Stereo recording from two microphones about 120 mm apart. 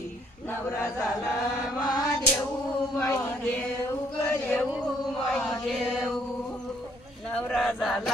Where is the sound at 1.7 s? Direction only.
35° left (ahead or behind).